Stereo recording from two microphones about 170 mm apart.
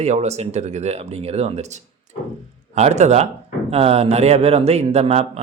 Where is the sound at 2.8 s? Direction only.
40° right (ahead or behind).